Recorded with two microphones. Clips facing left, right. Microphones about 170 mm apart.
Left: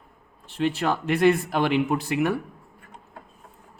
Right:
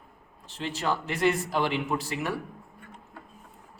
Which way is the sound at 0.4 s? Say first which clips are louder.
Left 6 dB; 55° left (ahead or behind).